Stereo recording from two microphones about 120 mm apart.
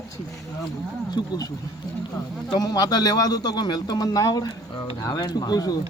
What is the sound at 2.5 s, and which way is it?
A man's voice, 35° left (ahead or behind).